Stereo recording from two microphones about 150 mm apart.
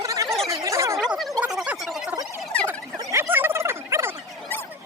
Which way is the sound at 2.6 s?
15° right (ahead or behind).